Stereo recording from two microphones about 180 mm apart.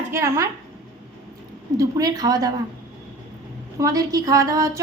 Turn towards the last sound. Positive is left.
turn(degrees=-20)  # may be behind; listen again after turning